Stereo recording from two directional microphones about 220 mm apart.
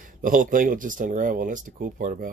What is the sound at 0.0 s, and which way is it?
Speech, 40° right (ahead or behind).